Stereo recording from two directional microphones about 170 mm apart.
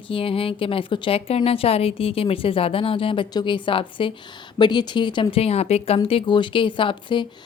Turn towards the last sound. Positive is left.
turn(degrees=30)  # may be behind; listen again after turning